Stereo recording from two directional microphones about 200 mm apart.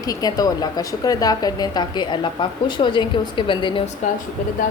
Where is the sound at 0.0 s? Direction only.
20° left (ahead or behind).